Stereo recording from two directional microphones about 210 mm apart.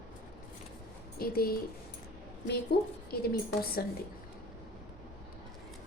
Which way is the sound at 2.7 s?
50° left (ahead or behind).